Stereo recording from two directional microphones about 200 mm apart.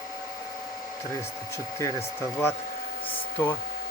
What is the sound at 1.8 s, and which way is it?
Speech, 10° left (ahead or behind).